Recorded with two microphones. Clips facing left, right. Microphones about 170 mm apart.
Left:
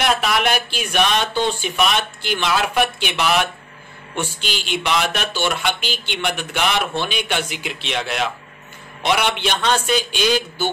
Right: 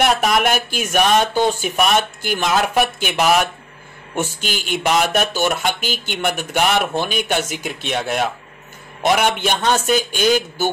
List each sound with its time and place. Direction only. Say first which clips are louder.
0.0 s speech: right 3 dB; 45° right (ahead or behind)